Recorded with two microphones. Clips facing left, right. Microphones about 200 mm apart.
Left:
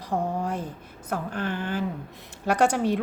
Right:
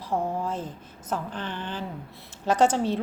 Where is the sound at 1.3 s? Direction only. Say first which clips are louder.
Left 5 dB; 10° left (ahead or behind).